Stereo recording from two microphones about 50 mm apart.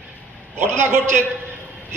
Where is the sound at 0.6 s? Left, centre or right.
Right.